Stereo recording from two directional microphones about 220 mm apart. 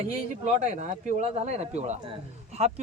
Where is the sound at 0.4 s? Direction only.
30° right (ahead or behind).